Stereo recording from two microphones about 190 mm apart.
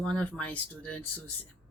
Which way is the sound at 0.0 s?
5° left (ahead or behind).